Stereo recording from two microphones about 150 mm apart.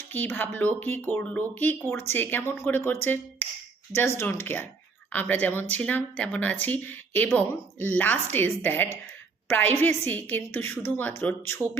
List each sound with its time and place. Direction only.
0.1 s speech: 10° left (ahead or behind)